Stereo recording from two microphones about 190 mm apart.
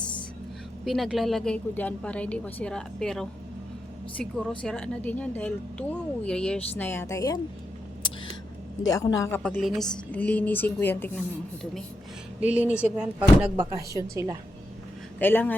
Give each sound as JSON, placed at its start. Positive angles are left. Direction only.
{"t": 0.9, "sound": "a woman's voice", "side_deg": 0}
{"t": 8.9, "sound": "a woman's voice", "side_deg": 15}
{"t": 9.4, "sound": "a woman's voice", "side_deg": 5}
{"t": 12.4, "sound": "speech", "side_deg": -10}
{"t": 15.2, "sound": "a woman's voice", "side_deg": 10}